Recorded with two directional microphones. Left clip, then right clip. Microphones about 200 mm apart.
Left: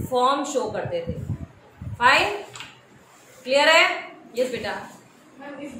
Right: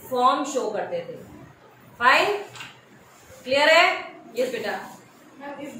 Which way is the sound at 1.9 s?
55° left (ahead or behind).